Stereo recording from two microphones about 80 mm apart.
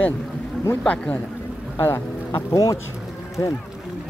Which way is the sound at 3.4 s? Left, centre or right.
Left.